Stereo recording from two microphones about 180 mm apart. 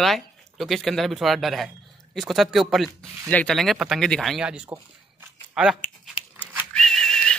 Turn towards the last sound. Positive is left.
turn(degrees=5)  # may be behind; listen again after turning